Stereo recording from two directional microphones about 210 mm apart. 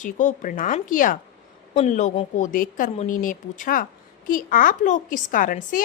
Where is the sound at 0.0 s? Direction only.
35° left (ahead or behind).